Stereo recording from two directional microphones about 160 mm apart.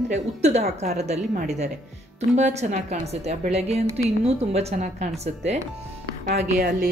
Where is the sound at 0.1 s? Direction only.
45° right (ahead or behind).